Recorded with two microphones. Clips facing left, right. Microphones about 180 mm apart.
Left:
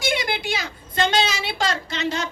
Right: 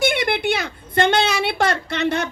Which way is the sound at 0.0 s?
60° right (ahead or behind).